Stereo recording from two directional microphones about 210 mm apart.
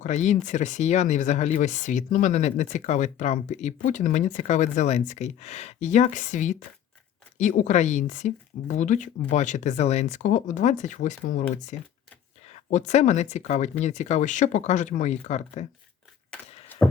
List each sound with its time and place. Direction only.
0.0 s speech: 35° left (ahead or behind)